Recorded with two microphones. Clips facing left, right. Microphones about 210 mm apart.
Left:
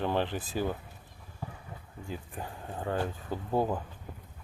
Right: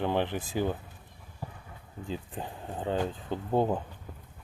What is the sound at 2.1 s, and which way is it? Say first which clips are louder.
Speech: right 3 dB; 20° right (ahead or behind).